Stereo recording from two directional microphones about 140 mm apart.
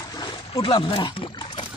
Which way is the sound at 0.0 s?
30° left (ahead or behind).